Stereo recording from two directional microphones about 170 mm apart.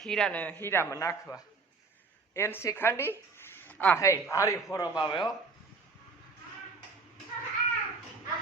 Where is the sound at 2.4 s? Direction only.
15° left (ahead or behind).